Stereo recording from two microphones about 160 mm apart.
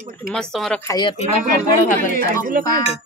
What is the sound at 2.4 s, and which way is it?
Speech, 65° right (ahead or behind).